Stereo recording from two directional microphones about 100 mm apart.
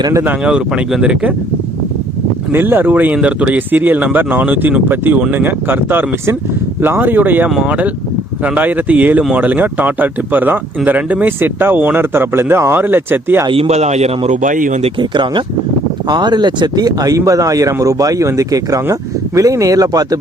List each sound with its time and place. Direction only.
0.3 s speech: 10° right (ahead or behind)
2.5 s speech: 20° right (ahead or behind)
13.5 s a man's voice: 80° right
15.1 s speech: 55° right (ahead or behind)